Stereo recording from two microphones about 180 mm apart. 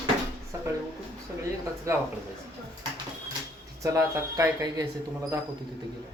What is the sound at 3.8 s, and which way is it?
Speech, 20° right (ahead or behind).